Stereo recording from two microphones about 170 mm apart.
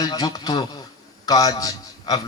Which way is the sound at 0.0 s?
25° left (ahead or behind).